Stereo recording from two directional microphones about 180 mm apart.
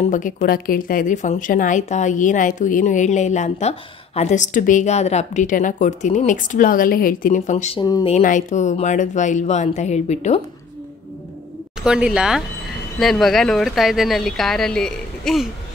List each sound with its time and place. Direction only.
0.0 s a woman's voice: 45° left (ahead or behind)
7.8 s speech: 20° left (ahead or behind)
8.1 s speech: 45° left (ahead or behind)
11.8 s speech: 5° right (ahead or behind)